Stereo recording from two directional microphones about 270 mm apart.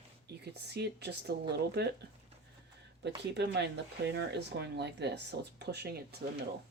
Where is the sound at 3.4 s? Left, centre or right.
Right.